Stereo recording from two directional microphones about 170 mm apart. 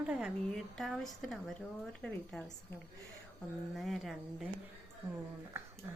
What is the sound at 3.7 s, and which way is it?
Speech, centre (ahead or behind).